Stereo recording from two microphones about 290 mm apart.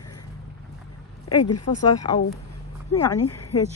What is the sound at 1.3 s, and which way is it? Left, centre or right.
Speech, left.